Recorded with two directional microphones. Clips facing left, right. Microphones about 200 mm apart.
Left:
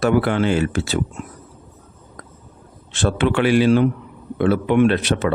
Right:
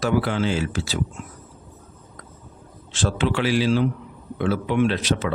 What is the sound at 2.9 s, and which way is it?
Speech, 60° left (ahead or behind).